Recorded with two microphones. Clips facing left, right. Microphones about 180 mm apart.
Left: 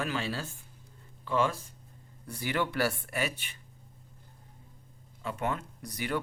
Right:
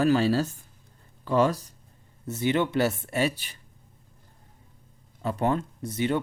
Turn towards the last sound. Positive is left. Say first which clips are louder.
# right 7 dB
turn(degrees=-25)  # may be behind; listen again after turning